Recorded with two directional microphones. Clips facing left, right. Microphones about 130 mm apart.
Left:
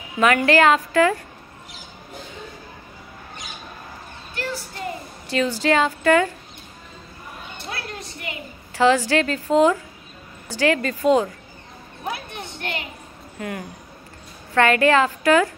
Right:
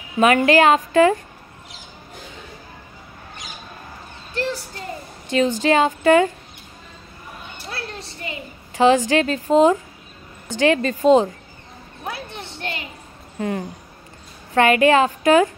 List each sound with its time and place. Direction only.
0.2 s a woman's voice: 20° right (ahead or behind)
5.3 s a woman's voice: 20° right (ahead or behind)
7.7 s a sound: 30° right (ahead or behind)
8.7 s a woman's voice: 15° right (ahead or behind)
13.4 s a woman's voice: 25° right (ahead or behind)